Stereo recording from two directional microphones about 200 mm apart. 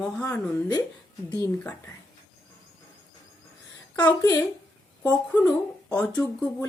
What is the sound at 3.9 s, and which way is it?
Speech, 20° left (ahead or behind).